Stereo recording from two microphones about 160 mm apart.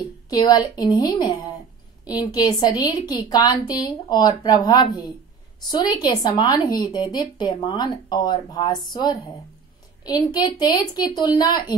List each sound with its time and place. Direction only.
0.3 s speech: 25° left (ahead or behind)